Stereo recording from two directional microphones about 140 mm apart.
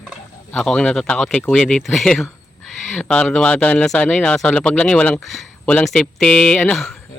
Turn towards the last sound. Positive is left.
turn(degrees=5)  # may be behind; listen again after turning